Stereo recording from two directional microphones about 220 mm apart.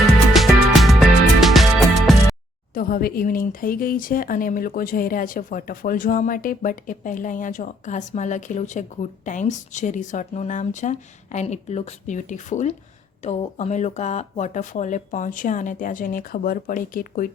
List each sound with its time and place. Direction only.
0.3 s music: centre (ahead or behind)
2.7 s speech: 40° left (ahead or behind)